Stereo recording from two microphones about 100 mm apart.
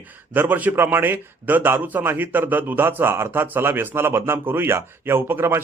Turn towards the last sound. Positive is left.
turn(degrees=-25)  # may be behind; listen again after turning